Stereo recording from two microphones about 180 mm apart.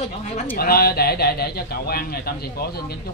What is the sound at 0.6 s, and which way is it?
Speech, 60° left (ahead or behind).